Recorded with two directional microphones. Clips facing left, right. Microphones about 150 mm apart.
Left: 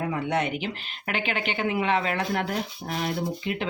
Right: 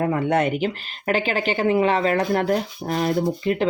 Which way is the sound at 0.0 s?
50° right (ahead or behind).